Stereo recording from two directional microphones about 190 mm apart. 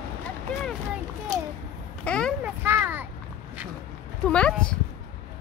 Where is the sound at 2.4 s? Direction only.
10° right (ahead or behind).